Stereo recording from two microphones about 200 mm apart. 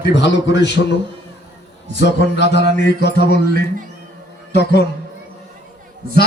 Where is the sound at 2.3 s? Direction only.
60° left (ahead or behind).